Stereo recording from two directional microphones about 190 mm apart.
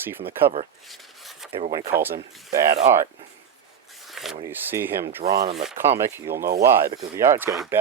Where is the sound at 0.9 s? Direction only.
Centre (ahead or behind).